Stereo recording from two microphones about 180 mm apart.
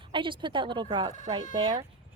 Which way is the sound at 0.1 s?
25° right (ahead or behind).